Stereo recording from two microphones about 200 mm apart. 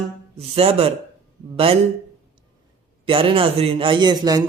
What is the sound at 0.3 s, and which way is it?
A man's voice, 30° right (ahead or behind).